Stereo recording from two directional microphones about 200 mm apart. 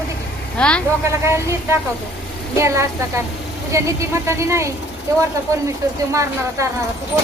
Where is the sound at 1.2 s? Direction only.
15° right (ahead or behind).